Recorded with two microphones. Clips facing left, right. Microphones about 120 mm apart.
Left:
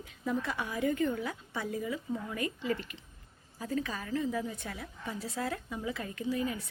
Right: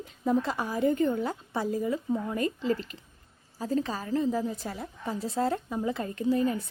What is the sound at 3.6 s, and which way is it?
A woman's voice, 30° right (ahead or behind).